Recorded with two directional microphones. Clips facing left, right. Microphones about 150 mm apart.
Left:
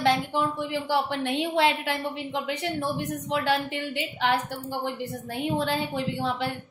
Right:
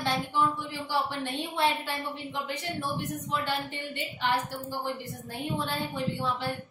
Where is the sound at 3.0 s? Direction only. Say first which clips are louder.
Left 4 dB; 90° left.